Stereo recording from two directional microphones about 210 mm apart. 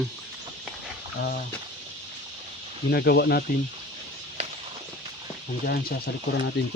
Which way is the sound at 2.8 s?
50° left (ahead or behind).